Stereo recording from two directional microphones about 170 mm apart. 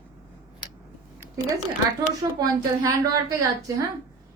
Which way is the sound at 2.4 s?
25° right (ahead or behind).